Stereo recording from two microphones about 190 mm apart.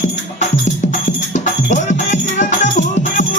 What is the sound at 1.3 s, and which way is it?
Music, 40° left (ahead or behind).